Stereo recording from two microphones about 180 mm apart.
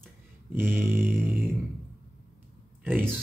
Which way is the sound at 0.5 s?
10° right (ahead or behind).